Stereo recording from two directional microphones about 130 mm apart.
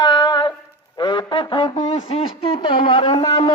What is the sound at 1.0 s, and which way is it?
Music, 35° left (ahead or behind).